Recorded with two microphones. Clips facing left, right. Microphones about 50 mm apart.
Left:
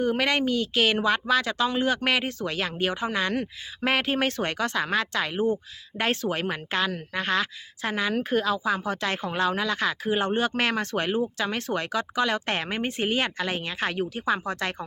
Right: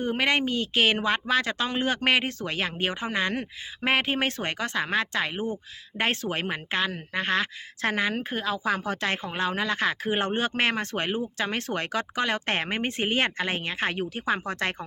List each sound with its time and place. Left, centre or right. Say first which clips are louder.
0.0 s speech: left 1 dB; right
8.2 s speech: left 5 dB; right
8.6 s speech: even; right
9.2 s speech: left 2 dB; right